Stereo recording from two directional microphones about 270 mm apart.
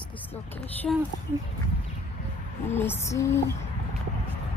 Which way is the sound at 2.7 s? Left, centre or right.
Centre.